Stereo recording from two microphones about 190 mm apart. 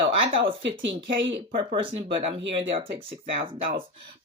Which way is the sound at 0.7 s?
75° right (ahead or behind).